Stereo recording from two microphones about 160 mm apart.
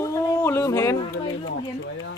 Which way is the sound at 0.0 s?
15° left (ahead or behind).